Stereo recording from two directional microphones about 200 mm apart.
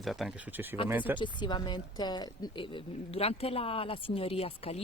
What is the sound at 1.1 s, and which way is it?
Speech, 25° left (ahead or behind).